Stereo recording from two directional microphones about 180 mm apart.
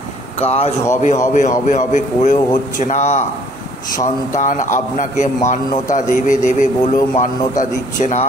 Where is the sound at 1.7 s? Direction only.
45° left (ahead or behind).